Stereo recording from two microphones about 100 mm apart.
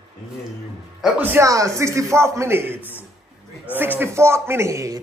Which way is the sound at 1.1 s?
20° right (ahead or behind).